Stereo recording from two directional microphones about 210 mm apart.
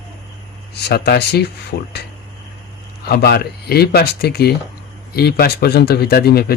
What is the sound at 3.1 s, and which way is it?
Speech, 50° left (ahead or behind).